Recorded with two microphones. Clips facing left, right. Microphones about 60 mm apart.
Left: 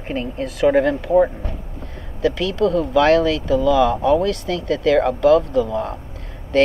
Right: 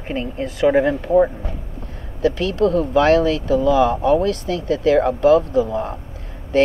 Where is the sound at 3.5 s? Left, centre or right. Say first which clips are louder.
Even; right.